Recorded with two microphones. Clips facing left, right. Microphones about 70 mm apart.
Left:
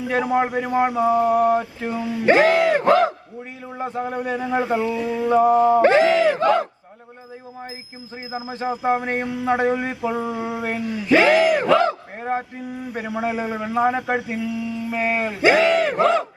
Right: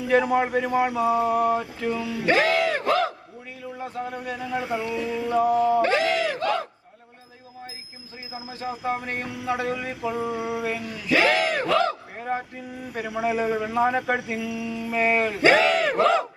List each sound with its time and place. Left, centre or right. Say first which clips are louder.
0.1 s a man's voice: even; centre
3.6 s chant: left 5 dB; left
8.3 s chant: left 7 dB; left
9.7 s speech: left 4 dB; left
10.2 s a man's voice: left 2 dB; left; by 16.0 s centre